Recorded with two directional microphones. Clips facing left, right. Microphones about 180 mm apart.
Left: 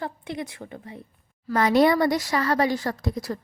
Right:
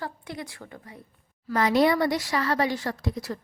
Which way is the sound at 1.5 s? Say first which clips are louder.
Left 2 dB; 50° left (ahead or behind).